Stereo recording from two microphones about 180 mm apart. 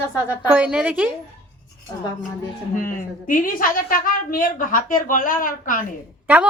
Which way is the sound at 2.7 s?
50° left (ahead or behind).